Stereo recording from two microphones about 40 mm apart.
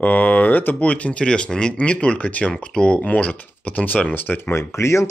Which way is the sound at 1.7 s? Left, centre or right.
Left.